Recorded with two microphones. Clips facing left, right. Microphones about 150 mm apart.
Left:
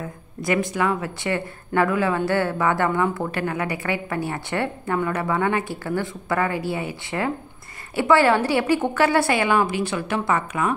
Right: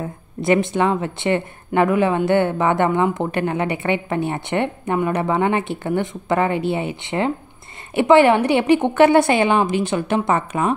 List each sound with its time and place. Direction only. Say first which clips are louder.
0.0 s speech: right 5 dB; 25° right (ahead or behind)